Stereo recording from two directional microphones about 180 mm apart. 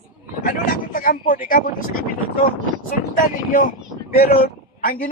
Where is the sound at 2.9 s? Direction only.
50° left (ahead or behind).